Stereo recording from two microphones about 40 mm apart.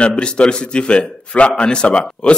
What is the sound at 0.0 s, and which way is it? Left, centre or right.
A man's voice, left.